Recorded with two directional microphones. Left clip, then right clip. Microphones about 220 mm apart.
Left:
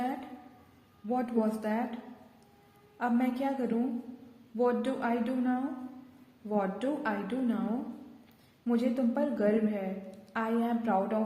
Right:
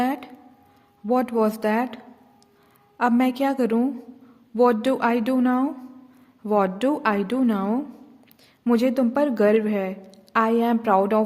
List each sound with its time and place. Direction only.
1.0 s a woman's voice: 45° right (ahead or behind)
3.0 s a woman's voice: 45° right (ahead or behind)
8.6 s a woman's voice: 50° right (ahead or behind)